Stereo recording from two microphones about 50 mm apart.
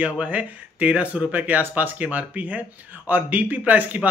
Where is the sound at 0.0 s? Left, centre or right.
Right.